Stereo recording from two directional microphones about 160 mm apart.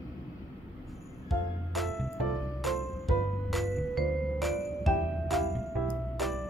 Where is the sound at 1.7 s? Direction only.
Centre (ahead or behind).